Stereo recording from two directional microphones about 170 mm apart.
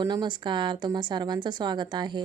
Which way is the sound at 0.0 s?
25° right (ahead or behind).